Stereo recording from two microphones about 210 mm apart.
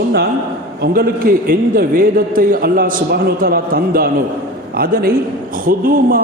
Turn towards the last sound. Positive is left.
turn(degrees=-40)  # may be behind; listen again after turning